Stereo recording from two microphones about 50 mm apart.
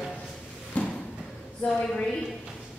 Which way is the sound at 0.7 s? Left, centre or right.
Left.